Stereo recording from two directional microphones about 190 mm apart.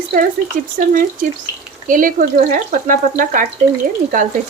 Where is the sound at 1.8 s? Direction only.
45° right (ahead or behind).